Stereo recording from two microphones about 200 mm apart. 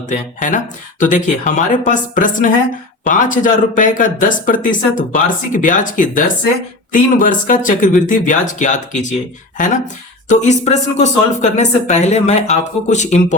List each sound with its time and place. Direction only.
0.1 s speech: 40° left (ahead or behind)
10.2 s speech: 35° left (ahead or behind)